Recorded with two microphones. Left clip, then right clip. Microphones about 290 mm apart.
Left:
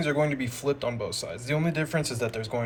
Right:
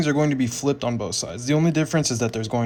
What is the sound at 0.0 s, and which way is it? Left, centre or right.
Speech, centre.